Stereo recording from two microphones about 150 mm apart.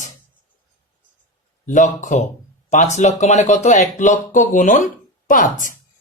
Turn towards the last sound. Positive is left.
turn(degrees=60)  # may be behind; listen again after turning